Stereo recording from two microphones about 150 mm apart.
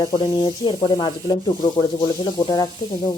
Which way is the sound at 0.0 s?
30° left (ahead or behind).